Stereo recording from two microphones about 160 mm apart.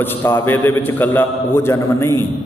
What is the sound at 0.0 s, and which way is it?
A man's voice, 15° left (ahead or behind).